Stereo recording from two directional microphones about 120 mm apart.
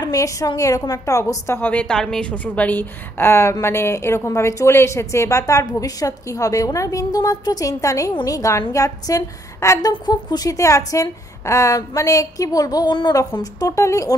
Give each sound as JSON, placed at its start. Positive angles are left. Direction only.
{"t": 0.0, "sound": "a woman's voice", "side_deg": 30}